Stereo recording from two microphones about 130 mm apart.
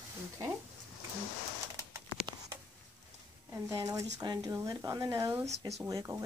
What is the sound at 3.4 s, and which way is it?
A woman's voice, 25° right (ahead or behind).